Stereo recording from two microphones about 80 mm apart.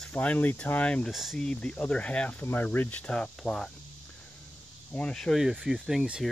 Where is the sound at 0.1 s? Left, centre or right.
Centre.